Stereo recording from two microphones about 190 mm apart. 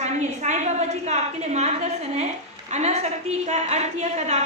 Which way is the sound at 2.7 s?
35° right (ahead or behind).